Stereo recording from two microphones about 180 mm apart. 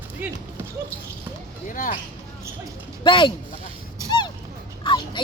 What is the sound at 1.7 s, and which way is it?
Speech, 50° left (ahead or behind).